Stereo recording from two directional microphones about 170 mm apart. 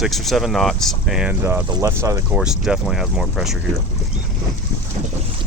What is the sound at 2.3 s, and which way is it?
Speech, 5° right (ahead or behind).